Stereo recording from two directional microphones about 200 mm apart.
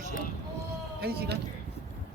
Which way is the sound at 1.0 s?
50° right (ahead or behind).